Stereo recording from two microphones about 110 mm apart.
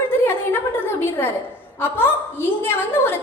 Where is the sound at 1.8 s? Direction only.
20° left (ahead or behind).